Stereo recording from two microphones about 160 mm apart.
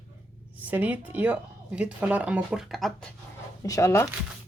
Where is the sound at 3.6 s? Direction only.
20° left (ahead or behind).